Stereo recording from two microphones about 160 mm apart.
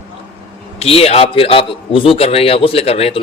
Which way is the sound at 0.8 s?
40° left (ahead or behind).